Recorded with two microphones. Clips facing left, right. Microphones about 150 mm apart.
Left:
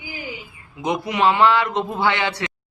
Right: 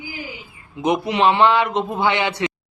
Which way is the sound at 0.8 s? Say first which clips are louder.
Right 2 dB; 20° right (ahead or behind).